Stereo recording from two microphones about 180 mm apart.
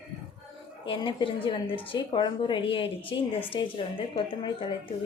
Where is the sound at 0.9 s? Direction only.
25° left (ahead or behind).